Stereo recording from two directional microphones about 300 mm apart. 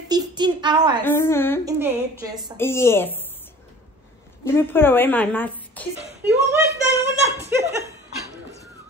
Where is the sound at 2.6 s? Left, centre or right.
Centre.